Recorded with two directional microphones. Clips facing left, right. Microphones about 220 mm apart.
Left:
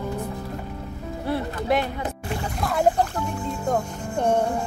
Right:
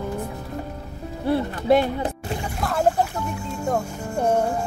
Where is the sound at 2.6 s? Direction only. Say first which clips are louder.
Even; centre (ahead or behind).